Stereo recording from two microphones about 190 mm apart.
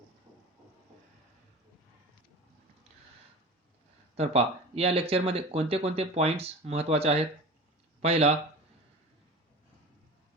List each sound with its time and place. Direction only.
4.1 s speech: 35° right (ahead or behind)